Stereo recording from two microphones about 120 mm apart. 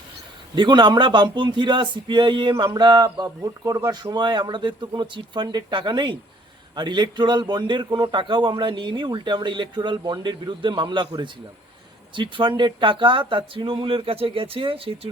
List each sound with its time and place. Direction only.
0.5 s speech: 40° right (ahead or behind)